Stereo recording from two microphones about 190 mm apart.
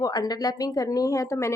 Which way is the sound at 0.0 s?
20° left (ahead or behind).